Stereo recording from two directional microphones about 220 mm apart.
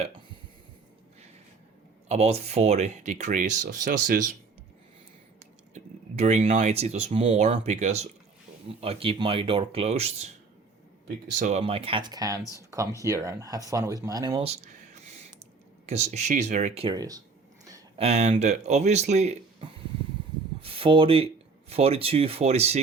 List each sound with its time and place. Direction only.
0.0 s burping: 20° right (ahead or behind)
2.0 s speech: 30° right (ahead or behind)
5.7 s speech: 30° right (ahead or behind)
11.3 s speech: 30° right (ahead or behind)
17.7 s speech: 25° right (ahead or behind)
20.6 s a sound: 25° right (ahead or behind)
21.7 s speech: 25° right (ahead or behind)